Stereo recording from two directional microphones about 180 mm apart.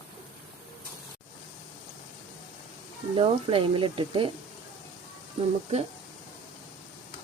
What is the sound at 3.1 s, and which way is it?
Speech, 30° right (ahead or behind).